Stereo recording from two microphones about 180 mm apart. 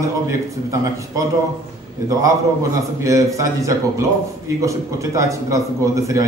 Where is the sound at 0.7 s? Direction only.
15° right (ahead or behind).